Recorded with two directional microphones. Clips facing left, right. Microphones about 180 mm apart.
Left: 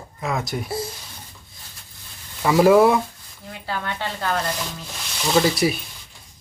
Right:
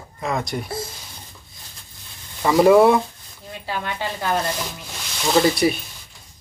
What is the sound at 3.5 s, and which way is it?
Speech, 15° right (ahead or behind).